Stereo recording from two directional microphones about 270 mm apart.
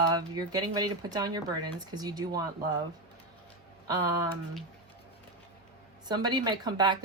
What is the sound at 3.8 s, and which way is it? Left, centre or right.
Speech, centre.